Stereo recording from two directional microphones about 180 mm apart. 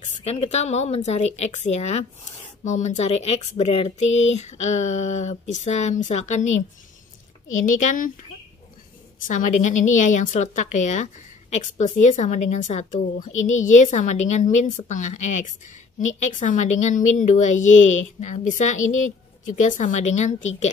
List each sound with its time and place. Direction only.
0.0 s speech: 35° left (ahead or behind)
7.6 s a woman's voice: 45° left (ahead or behind)
9.2 s a woman's voice: 45° left (ahead or behind)